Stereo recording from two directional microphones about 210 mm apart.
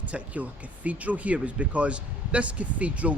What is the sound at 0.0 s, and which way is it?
Speech, 5° right (ahead or behind).